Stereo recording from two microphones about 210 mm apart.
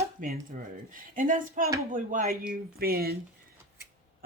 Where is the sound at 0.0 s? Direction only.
40° right (ahead or behind).